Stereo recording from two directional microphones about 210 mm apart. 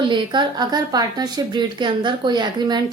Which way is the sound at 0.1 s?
20° right (ahead or behind).